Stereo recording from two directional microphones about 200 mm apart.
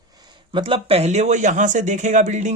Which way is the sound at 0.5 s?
25° right (ahead or behind).